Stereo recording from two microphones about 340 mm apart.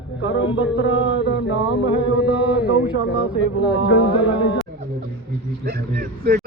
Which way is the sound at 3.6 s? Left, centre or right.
Centre.